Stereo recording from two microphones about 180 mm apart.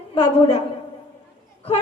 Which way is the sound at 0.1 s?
30° left (ahead or behind).